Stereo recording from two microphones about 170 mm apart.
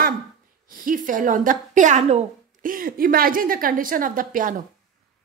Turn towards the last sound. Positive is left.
turn(degrees=-55)  # may be behind; listen again after turning